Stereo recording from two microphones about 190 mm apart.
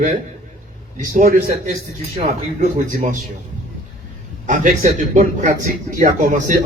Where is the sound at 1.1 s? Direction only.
45° right (ahead or behind).